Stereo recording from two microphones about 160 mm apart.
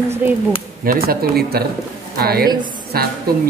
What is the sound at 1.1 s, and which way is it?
Speech, 75° right (ahead or behind).